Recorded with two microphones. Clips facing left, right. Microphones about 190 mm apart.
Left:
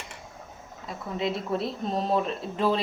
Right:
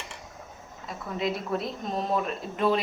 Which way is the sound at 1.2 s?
30° left (ahead or behind).